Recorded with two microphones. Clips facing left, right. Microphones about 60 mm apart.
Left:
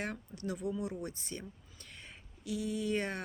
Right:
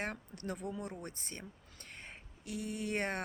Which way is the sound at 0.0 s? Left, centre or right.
Right.